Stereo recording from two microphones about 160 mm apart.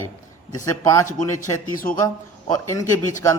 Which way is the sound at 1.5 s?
20° left (ahead or behind).